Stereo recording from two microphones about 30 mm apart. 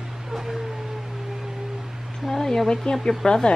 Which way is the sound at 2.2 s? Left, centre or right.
Centre.